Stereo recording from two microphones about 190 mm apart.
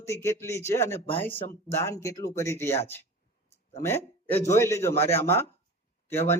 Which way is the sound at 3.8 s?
10° left (ahead or behind).